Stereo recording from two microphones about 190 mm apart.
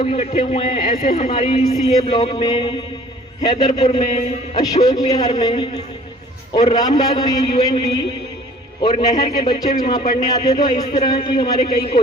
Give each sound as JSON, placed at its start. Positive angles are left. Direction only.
{"t": 0.0, "sound": "a man's voice", "side_deg": 30}
{"t": 4.6, "sound": "a man's voice", "side_deg": 20}